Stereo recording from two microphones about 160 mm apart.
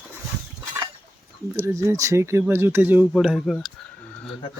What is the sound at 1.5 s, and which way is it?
Speech, 15° right (ahead or behind).